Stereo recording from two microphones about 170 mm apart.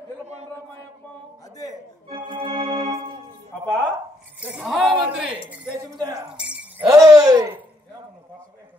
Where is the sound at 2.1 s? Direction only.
30° right (ahead or behind).